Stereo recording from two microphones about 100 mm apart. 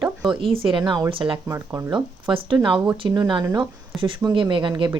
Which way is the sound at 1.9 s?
55° right (ahead or behind).